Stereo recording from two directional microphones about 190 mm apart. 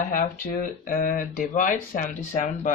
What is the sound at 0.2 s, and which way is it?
Speech, 45° left (ahead or behind).